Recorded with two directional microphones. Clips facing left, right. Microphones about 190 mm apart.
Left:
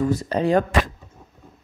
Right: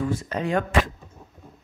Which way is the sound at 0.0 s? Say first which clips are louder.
Left 5 dB; 35° left (ahead or behind).